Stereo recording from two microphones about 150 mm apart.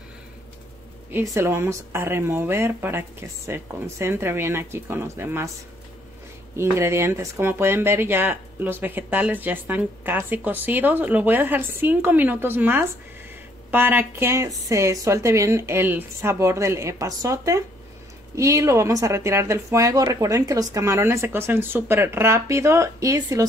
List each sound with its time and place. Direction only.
1.1 s speech: 20° right (ahead or behind)
6.5 s speech: 15° right (ahead or behind)